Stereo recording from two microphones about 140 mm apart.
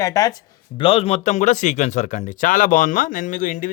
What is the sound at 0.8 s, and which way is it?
Speech, 40° left (ahead or behind).